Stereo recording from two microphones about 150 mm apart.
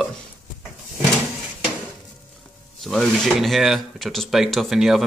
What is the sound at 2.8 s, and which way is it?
Speech, centre (ahead or behind).